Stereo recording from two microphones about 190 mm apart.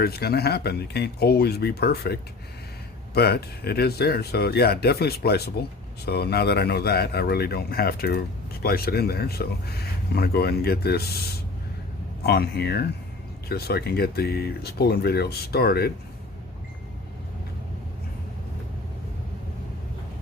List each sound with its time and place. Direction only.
0.0 s speech: 55° left (ahead or behind)
3.2 s speech: 55° left (ahead or behind)
12.2 s speech: 60° left (ahead or behind)